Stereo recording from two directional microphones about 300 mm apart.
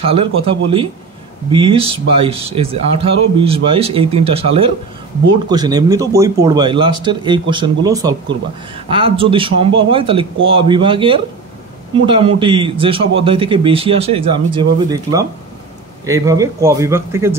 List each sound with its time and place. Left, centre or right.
0.0 s speech: centre